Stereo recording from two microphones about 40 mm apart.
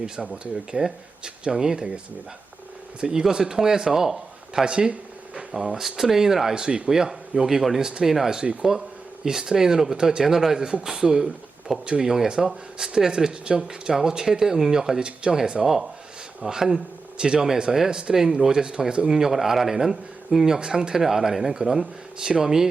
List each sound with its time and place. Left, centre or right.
0.2 s speech: centre
3.0 s speech: centre
4.6 s a sound: right
5.5 s speech: centre